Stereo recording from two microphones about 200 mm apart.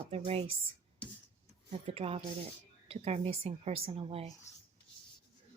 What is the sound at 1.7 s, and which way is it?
A woman's voice, 30° right (ahead or behind).